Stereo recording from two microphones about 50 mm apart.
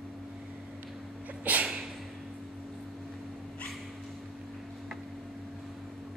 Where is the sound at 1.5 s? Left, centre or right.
Right.